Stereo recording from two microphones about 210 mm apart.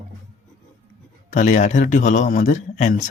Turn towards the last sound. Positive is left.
turn(degrees=35)  # may be behind; listen again after turning